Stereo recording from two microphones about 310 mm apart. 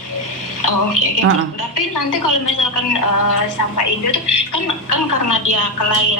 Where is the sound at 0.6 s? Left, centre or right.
Left.